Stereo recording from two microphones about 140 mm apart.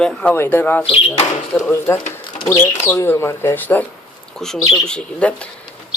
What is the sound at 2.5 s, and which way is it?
Speech, 20° left (ahead or behind).